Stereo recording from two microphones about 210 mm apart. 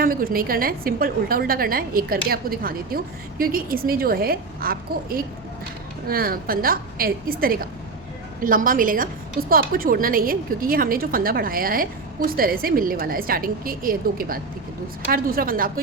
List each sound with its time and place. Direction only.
0.0 s a woman's voice: 45° right (ahead or behind)